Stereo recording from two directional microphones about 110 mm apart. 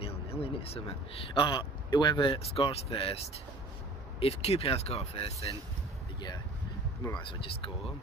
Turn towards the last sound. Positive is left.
turn(degrees=50)  # may be behind; listen again after turning